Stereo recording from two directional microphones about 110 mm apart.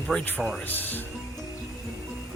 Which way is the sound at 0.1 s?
10° left (ahead or behind).